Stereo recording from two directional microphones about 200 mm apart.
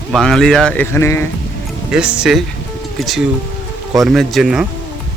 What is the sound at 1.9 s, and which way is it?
Speech, 5° right (ahead or behind).